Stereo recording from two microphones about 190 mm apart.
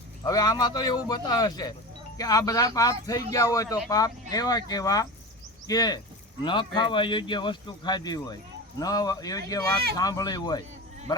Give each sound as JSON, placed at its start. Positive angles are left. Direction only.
{"t": 0.3, "sound": "speech", "side_deg": 20}